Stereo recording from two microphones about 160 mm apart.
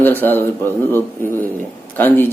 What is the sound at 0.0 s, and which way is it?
Speech, 10° left (ahead or behind).